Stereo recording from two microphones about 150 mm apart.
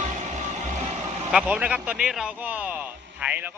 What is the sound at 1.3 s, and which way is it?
Speech, 5° right (ahead or behind).